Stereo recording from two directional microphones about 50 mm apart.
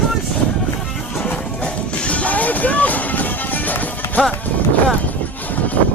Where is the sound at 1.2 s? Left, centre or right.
Left.